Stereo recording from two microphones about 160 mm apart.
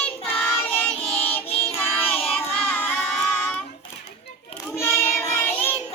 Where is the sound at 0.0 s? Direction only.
10° left (ahead or behind).